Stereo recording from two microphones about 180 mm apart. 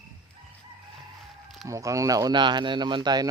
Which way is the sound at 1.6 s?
15° right (ahead or behind).